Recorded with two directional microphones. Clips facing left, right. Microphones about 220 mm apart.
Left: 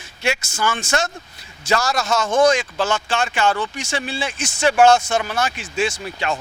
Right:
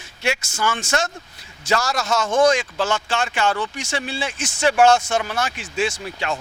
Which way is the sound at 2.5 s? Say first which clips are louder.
Left 1 dB; 15° left (ahead or behind).